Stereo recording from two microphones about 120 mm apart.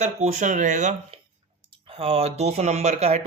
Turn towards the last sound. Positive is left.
turn(degrees=-65)  # may be behind; listen again after turning